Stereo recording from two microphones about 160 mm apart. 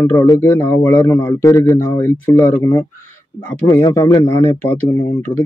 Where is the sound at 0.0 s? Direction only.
20° left (ahead or behind).